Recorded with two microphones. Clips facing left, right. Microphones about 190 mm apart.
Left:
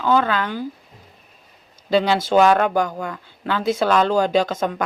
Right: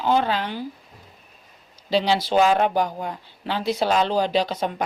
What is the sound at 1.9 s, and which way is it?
A woman's voice, 50° left (ahead or behind).